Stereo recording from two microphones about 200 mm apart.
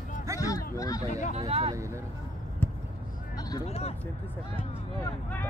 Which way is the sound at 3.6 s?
30° left (ahead or behind).